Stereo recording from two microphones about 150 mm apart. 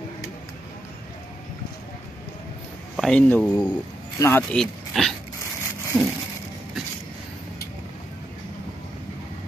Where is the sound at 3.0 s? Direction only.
5° left (ahead or behind).